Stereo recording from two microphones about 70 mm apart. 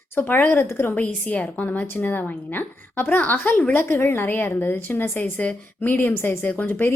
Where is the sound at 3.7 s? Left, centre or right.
Left.